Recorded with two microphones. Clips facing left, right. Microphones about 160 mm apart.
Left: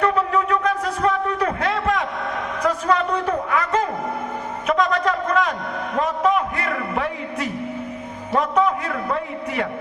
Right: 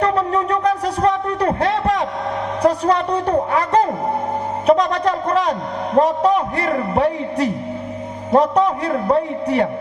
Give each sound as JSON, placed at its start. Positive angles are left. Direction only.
{"t": 0.0, "sound": "wind instrument", "side_deg": -35}
{"t": 2.6, "sound": "a sound", "side_deg": -35}
{"t": 4.6, "sound": "a man's voice", "side_deg": -35}